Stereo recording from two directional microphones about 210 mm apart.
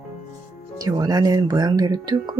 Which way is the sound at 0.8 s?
20° right (ahead or behind).